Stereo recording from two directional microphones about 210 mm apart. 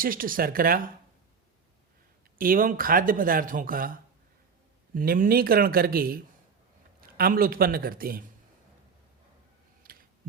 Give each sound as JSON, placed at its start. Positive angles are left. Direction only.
{"t": 0.0, "sound": "speech", "side_deg": -40}
{"t": 2.4, "sound": "speech", "side_deg": -40}
{"t": 4.9, "sound": "speech", "side_deg": -40}
{"t": 9.8, "sound": "a sound", "side_deg": -45}